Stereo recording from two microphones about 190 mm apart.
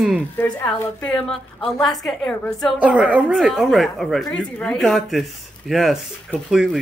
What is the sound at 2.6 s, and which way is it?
Speech, 5° right (ahead or behind).